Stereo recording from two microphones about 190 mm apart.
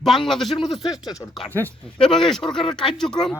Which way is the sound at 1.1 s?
20° left (ahead or behind).